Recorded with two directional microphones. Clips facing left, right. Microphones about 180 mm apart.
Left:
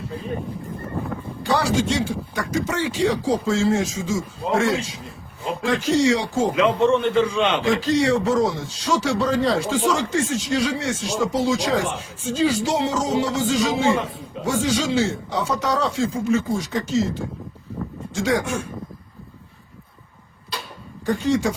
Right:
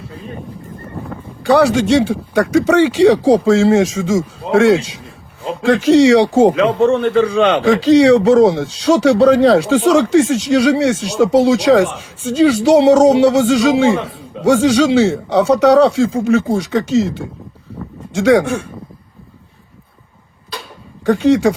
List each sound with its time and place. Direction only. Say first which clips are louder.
1.5 s speech: right 9 dB; 65° right (ahead or behind)
6.6 s a man's voice: right 5 dB; 40° right (ahead or behind)
7.6 s speech: right 10 dB; 75° right (ahead or behind)
21.0 s speech: right 9 dB; 70° right (ahead or behind)